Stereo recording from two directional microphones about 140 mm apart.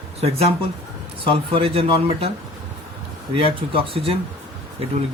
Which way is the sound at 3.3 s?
40° right (ahead or behind).